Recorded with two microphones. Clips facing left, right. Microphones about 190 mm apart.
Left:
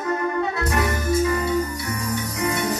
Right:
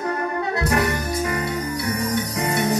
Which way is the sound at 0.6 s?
65° right (ahead or behind).